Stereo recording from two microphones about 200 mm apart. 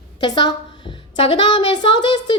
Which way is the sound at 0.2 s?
20° left (ahead or behind).